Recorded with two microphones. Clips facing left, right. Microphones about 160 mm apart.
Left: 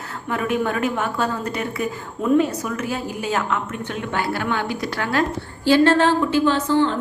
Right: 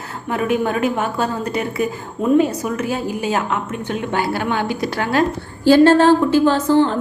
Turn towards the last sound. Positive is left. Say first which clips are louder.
# right 4 dB
turn(degrees=-45)  # may be behind; listen again after turning